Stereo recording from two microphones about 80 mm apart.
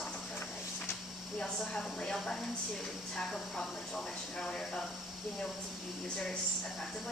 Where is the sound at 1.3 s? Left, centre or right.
Centre.